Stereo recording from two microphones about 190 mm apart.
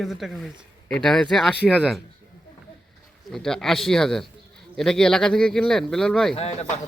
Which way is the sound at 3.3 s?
5° left (ahead or behind).